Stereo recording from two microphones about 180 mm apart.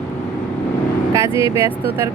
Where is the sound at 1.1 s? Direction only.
15° right (ahead or behind).